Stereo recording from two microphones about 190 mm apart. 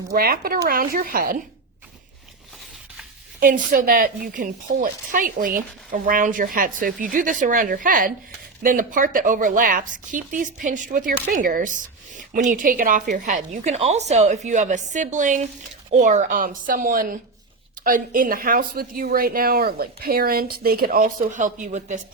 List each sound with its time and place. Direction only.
0.1 s a woman's voice: 50° right (ahead or behind)
3.4 s a woman's voice: 45° right (ahead or behind)